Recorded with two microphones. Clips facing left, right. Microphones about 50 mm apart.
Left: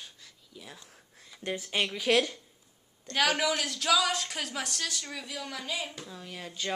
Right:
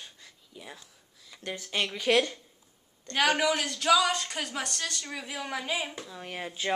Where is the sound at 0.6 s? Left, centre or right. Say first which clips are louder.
Right 2 dB; centre.